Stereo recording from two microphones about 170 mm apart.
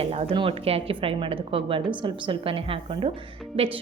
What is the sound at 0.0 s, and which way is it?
Speech, 35° right (ahead or behind).